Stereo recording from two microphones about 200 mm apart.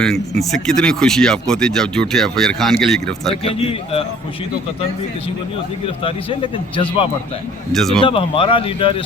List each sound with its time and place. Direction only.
0.0 s speech: centre (ahead or behind)
3.4 s speech: 30° left (ahead or behind)
6.0 s speech: 25° left (ahead or behind)
7.7 s speech: centre (ahead or behind)
8.0 s speech: 25° left (ahead or behind)